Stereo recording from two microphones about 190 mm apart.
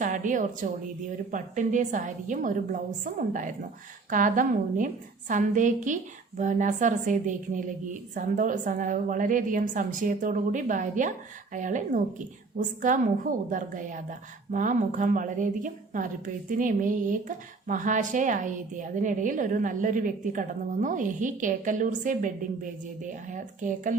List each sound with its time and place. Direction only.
0.0 s a woman's voice: 40° right (ahead or behind)